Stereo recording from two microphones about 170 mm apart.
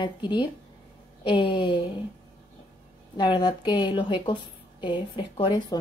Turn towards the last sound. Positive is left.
turn(degrees=30)  # may be behind; listen again after turning